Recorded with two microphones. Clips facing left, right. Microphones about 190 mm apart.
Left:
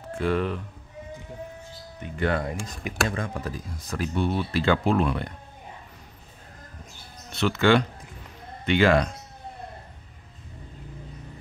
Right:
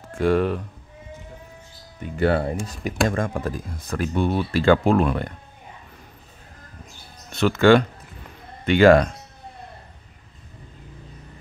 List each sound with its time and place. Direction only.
0.1 s speech: 45° right (ahead or behind)
2.1 s speech: 35° right (ahead or behind); by 5.3 s 50° right (ahead or behind)
7.3 s speech: 50° right (ahead or behind)